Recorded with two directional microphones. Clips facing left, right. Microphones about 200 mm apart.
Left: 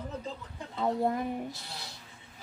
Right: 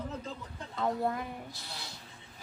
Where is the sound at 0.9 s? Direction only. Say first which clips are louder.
Left 4 dB; 25° left (ahead or behind).